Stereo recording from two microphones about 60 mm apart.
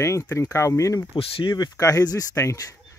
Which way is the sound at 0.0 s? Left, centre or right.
Left.